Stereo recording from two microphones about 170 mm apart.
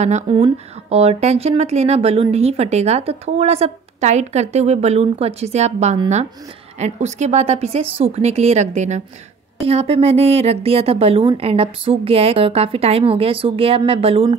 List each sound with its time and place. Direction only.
0.0 s speech: 35° right (ahead or behind)